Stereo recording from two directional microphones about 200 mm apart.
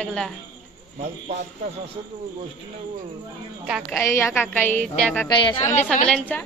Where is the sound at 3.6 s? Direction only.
5° right (ahead or behind).